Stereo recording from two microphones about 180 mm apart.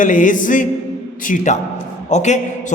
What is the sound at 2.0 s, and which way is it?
Speech, 40° left (ahead or behind).